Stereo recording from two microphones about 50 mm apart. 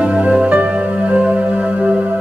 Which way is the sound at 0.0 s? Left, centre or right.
Right.